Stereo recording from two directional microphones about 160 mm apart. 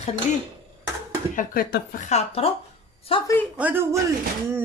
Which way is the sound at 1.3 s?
60° left (ahead or behind).